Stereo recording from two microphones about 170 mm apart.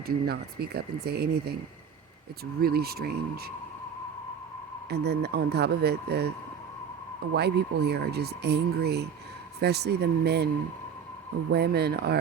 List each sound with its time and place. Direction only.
0.3 s speech: 65° right (ahead or behind)
4.9 s speech: 75° right (ahead or behind)
7.3 s speech: 75° right (ahead or behind)
11.5 s speech: 70° right (ahead or behind)